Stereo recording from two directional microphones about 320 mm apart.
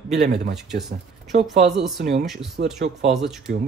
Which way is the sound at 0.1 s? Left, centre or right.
Right.